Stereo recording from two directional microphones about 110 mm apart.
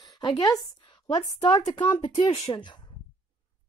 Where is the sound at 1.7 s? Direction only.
50° left (ahead or behind).